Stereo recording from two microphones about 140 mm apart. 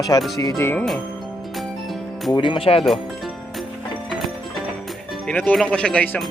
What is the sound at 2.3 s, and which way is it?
Speech, 35° left (ahead or behind).